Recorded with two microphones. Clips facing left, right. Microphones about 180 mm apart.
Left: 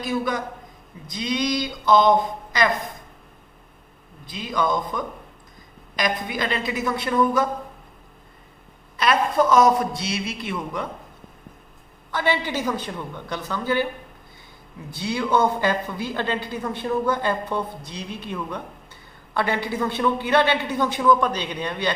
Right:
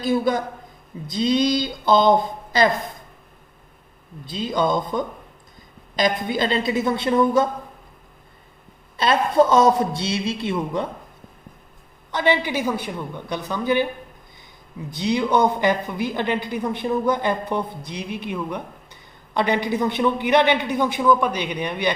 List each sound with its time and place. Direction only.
0.0 s speech: 30° right (ahead or behind)
4.3 s speech: 30° right (ahead or behind)
9.0 s speech: 25° right (ahead or behind)
12.1 s a woman's voice: 15° right (ahead or behind)
14.9 s a woman's voice: 20° right (ahead or behind)